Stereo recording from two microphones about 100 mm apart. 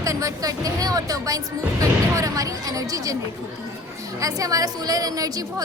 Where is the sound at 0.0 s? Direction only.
35° right (ahead or behind).